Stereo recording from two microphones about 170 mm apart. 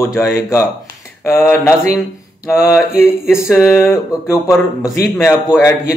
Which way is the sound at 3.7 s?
15° left (ahead or behind).